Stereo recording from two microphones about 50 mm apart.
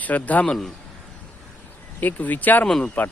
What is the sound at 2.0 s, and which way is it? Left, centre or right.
Speech, left.